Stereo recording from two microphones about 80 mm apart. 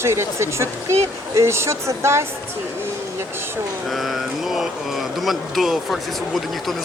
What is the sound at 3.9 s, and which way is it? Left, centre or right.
Speech, centre.